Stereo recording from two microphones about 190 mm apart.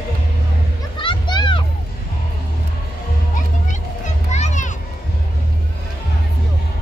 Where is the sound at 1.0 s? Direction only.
25° left (ahead or behind).